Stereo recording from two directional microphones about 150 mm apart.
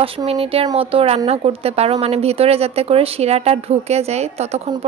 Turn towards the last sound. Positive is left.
turn(degrees=-45)  # may be behind; listen again after turning